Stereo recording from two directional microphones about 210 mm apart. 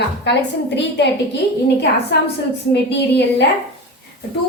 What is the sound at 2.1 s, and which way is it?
A woman's voice, 55° left (ahead or behind).